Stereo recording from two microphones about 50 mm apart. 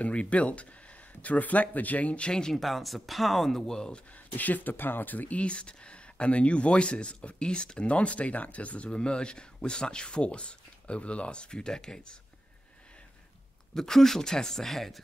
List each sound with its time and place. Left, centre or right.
0.0 s speech: left
2.5 s speech: centre
4.4 s speech: left; by 12.2 s centre
13.7 s speech: centre